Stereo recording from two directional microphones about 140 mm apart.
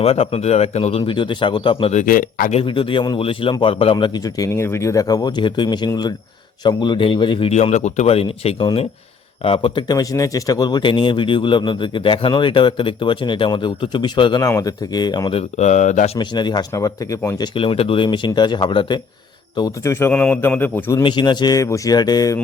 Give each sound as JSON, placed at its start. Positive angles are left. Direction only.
{"t": 0.0, "sound": "a man's voice", "side_deg": 45}
{"t": 1.9, "sound": "speech", "side_deg": 70}
{"t": 2.5, "sound": "speech", "side_deg": 40}
{"t": 3.9, "sound": "speech", "side_deg": 30}
{"t": 7.5, "sound": "a man's voice", "side_deg": 55}
{"t": 15.4, "sound": "speech", "side_deg": 55}
{"t": 16.1, "sound": "speech", "side_deg": 30}
{"t": 17.5, "sound": "a man's voice", "side_deg": 40}
{"t": 21.0, "sound": "speech", "side_deg": 35}